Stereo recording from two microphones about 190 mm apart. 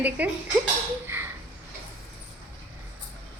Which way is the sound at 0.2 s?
10° right (ahead or behind).